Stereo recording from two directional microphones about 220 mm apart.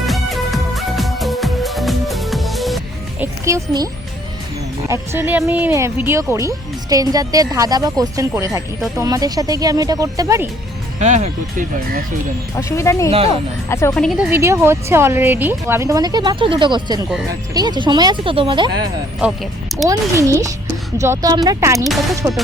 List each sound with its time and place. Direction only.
0.0 s music: centre (ahead or behind)
3.4 s speech: 15° right (ahead or behind)
4.9 s speech: 10° right (ahead or behind)
11.0 s speech: 30° right (ahead or behind)
12.5 s speech: 15° left (ahead or behind)
13.1 s speech: 25° right (ahead or behind)
13.7 s speech: 10° left (ahead or behind)
13.9 s speech: centre (ahead or behind); by 18.7 s 20° right (ahead or behind)
19.2 s speech: centre (ahead or behind)
19.9 s speech: 15° right (ahead or behind)